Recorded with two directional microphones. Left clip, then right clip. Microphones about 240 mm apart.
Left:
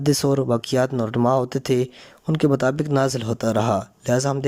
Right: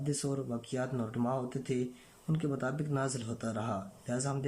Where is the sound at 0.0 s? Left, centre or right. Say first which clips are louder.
Left 16 dB; left.